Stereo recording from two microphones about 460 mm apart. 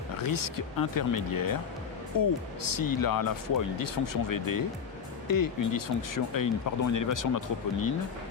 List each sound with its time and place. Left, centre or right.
0.2 s speech: left